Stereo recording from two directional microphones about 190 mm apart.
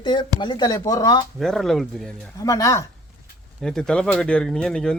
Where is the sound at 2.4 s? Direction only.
15° left (ahead or behind).